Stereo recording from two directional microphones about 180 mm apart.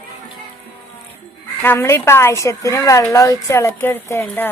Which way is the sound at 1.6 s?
10° left (ahead or behind).